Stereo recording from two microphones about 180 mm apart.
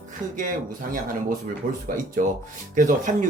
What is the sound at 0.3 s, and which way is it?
Speech, 50° right (ahead or behind).